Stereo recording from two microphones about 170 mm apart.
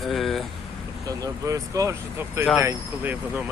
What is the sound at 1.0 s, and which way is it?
Speech, 20° right (ahead or behind).